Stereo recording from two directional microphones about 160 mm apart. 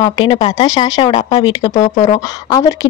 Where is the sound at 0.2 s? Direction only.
30° left (ahead or behind).